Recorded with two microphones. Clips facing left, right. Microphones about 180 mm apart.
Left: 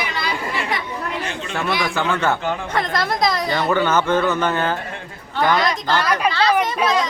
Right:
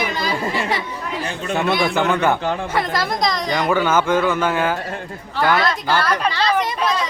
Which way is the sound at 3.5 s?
10° right (ahead or behind).